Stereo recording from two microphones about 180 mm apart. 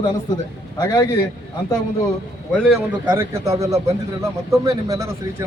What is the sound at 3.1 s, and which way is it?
A man's voice, 15° right (ahead or behind).